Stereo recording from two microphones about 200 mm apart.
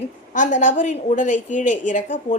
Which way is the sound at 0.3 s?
40° left (ahead or behind).